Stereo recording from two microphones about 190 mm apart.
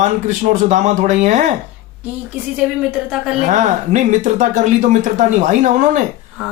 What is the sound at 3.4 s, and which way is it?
Speech, 40° right (ahead or behind).